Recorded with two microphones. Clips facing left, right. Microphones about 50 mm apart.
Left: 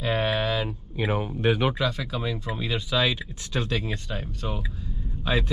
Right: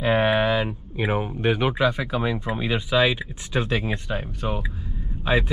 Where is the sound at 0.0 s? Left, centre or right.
Right.